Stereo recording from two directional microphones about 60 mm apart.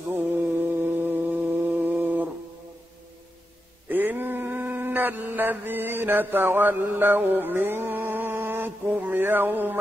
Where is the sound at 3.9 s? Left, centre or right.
Right.